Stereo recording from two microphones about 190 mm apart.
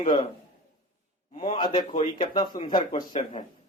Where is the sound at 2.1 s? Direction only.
25° left (ahead or behind).